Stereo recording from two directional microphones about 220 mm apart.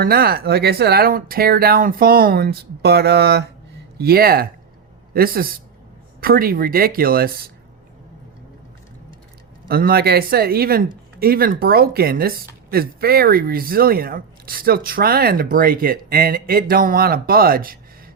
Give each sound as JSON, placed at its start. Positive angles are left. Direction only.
{"t": 0.0, "sound": "speech", "side_deg": -45}
{"t": 9.6, "sound": "speech", "side_deg": -45}